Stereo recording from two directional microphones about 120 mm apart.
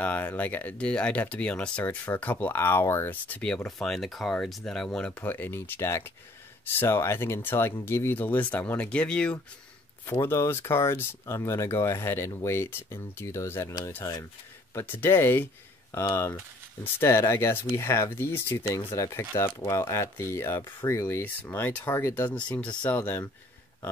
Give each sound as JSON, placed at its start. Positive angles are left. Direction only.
{"t": 0.0, "sound": "speech", "side_deg": 15}
{"t": 10.0, "sound": "speech", "side_deg": 20}